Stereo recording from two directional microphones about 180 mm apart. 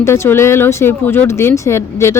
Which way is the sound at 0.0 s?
15° left (ahead or behind).